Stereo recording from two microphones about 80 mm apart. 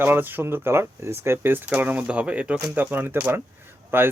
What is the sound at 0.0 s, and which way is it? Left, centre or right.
Speech, right.